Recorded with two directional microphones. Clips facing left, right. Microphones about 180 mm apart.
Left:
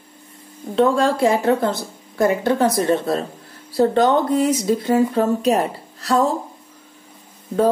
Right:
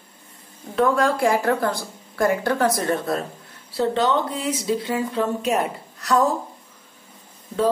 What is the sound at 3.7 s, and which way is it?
Speech, 45° left (ahead or behind).